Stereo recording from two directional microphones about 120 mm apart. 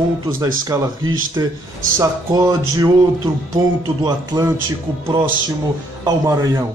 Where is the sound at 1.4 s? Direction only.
30° right (ahead or behind).